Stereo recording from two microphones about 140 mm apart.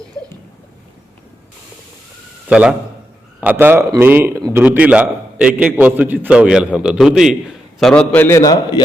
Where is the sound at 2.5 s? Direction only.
5° right (ahead or behind); by 8.8 s 25° left (ahead or behind).